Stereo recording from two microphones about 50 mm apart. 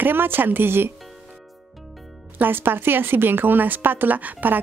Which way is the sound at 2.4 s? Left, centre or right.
Right.